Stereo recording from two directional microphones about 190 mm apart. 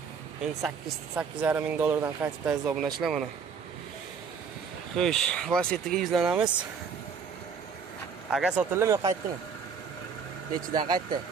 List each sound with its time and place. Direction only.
0.6 s speech: 5° right (ahead or behind)
4.9 s speech: 5° left (ahead or behind)
8.3 s speech: 5° right (ahead or behind)
8.7 s speech: 15° right (ahead or behind)
10.7 s speech: 20° right (ahead or behind)